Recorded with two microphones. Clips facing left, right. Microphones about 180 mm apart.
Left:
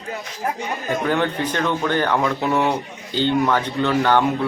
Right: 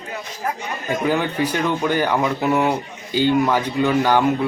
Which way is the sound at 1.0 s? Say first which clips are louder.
Right 2 dB; 10° right (ahead or behind).